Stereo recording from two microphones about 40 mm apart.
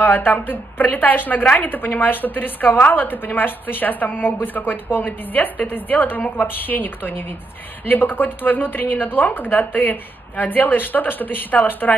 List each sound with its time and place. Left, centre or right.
0.0 s a woman's voice: left
1.4 s a woman's voice: left
1.7 s a woman's voice: left